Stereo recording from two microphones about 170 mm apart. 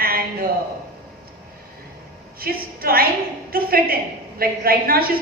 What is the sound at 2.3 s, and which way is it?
A woman's voice, 60° right (ahead or behind).